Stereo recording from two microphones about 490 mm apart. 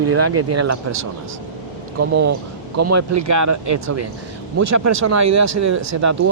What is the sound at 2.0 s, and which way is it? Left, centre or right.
Speech, right.